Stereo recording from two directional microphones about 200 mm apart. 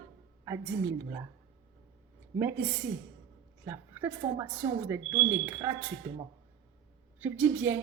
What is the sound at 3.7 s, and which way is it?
A woman's voice, 10° right (ahead or behind).